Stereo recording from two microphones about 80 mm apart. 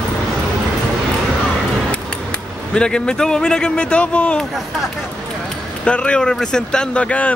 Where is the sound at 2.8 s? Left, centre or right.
Centre.